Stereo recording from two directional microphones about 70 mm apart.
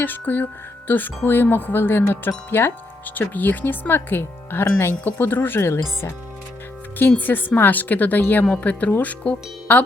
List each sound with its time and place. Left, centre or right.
0.0 s speech: left
7.2 s speech: left